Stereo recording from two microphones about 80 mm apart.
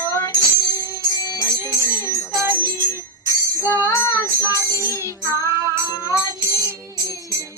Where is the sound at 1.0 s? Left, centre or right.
Left.